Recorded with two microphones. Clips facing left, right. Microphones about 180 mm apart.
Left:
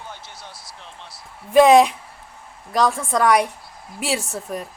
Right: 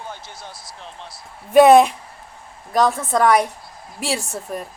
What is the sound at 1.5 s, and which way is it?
Speech, centre (ahead or behind).